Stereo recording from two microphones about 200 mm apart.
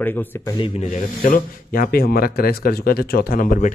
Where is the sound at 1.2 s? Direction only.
45° left (ahead or behind).